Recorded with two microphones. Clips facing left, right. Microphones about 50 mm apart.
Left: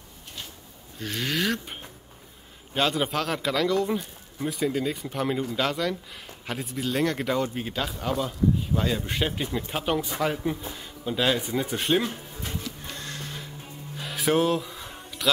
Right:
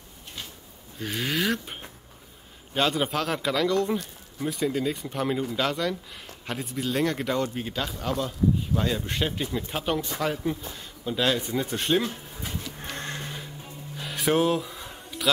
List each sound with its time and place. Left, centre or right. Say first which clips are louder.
0.9 s speech: even; centre
12.8 s a sound: right 3 dB; right
13.9 s music: even; centre